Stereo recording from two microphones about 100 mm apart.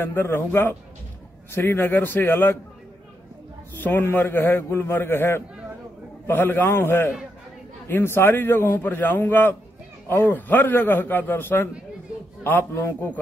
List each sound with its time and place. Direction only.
0.0 s a man's voice: 20° left (ahead or behind)
3.8 s a man's voice: 20° left (ahead or behind)